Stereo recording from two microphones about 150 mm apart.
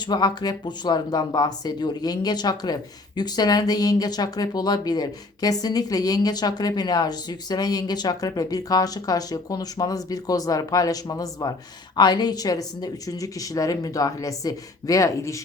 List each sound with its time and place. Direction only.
0.0 s speech: 25° left (ahead or behind)